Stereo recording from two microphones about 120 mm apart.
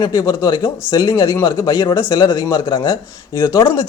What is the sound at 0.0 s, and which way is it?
Speech, 35° left (ahead or behind).